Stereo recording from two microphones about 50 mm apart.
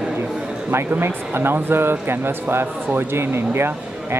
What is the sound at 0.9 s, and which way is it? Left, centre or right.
Speech, right.